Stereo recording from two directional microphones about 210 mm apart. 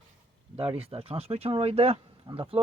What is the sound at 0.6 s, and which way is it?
Speech, 25° right (ahead or behind).